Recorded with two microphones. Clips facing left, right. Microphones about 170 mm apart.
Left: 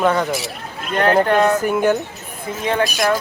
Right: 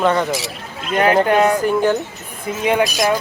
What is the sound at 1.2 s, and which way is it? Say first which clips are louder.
Speech: right 1 dB; 15° right (ahead or behind).